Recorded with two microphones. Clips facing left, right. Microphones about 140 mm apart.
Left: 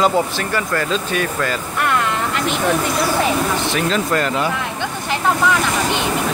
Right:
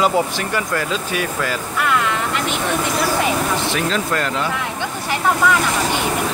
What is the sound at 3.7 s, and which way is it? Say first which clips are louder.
Speech: left 2 dB; centre (ahead or behind).